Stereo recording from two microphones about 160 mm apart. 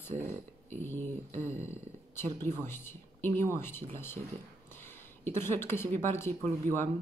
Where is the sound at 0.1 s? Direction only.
45° right (ahead or behind).